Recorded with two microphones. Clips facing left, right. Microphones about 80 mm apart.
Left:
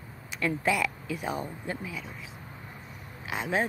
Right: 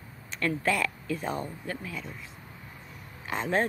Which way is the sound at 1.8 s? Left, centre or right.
Centre.